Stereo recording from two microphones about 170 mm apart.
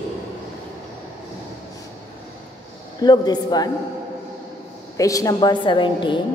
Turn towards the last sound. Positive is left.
turn(degrees=30)  # may be behind; listen again after turning